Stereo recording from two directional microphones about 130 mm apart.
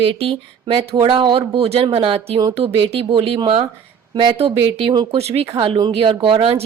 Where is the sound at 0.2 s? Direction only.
50° right (ahead or behind).